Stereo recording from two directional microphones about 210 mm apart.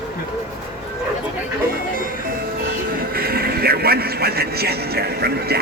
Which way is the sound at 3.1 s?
45° right (ahead or behind).